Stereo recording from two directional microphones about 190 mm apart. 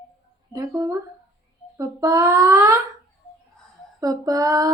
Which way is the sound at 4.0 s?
20° right (ahead or behind).